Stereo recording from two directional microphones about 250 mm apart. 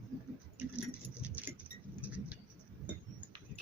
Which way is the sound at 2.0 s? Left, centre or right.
Centre.